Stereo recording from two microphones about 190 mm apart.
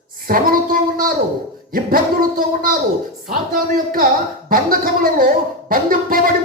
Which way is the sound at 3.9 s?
50° right (ahead or behind).